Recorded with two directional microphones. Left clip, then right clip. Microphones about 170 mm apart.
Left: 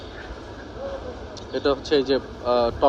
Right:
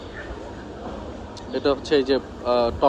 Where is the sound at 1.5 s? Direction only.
15° left (ahead or behind).